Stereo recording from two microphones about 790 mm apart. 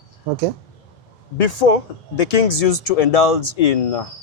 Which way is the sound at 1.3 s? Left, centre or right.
Left.